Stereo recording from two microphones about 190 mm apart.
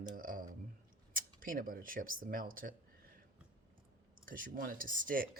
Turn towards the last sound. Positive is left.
turn(degrees=-45)  # may be behind; listen again after turning